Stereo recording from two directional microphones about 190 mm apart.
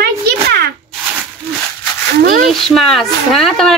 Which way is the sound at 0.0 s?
55° right (ahead or behind).